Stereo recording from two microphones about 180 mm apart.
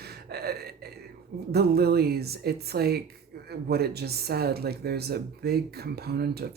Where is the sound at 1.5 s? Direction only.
60° right (ahead or behind).